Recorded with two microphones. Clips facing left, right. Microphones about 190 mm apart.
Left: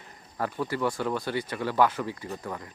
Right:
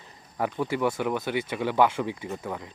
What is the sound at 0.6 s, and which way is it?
Speech, 10° right (ahead or behind).